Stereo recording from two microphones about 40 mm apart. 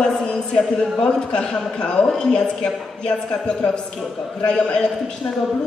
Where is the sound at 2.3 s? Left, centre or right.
Left.